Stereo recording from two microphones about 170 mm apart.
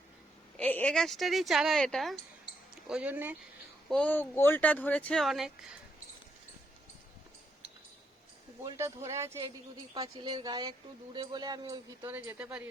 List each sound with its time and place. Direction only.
0.5 s a woman's voice: 10° left (ahead or behind); by 3.3 s 10° right (ahead or behind)
3.8 s speech: 5° left (ahead or behind)
8.6 s speech: 15° right (ahead or behind)
12.0 s speech: 10° right (ahead or behind)